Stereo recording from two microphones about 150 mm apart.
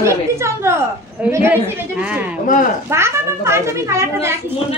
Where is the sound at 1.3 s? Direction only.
10° right (ahead or behind).